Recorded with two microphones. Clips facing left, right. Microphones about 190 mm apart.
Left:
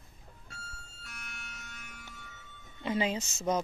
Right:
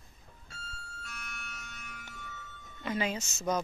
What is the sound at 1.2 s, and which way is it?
Music, 50° right (ahead or behind).